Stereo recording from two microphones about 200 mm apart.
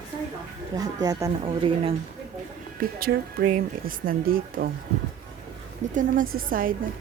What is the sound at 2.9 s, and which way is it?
A woman's voice, 50° right (ahead or behind).